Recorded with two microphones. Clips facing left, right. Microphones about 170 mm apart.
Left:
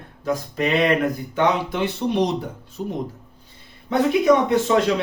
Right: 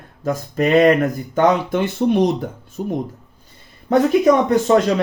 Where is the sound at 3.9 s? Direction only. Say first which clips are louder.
Right 3 dB; 45° right (ahead or behind).